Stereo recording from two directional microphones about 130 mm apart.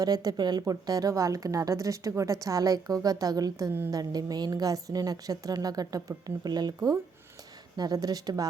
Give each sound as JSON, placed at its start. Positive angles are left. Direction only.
{"t": 0.0, "sound": "a woman's voice", "side_deg": -30}